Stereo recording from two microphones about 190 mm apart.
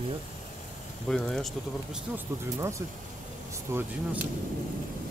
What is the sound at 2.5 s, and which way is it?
Speech, 15° right (ahead or behind).